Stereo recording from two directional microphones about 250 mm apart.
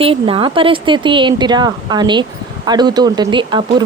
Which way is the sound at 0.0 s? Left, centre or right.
Right.